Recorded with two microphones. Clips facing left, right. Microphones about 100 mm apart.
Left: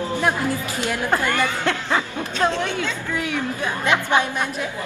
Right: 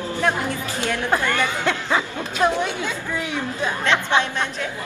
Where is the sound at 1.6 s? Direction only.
15° right (ahead or behind).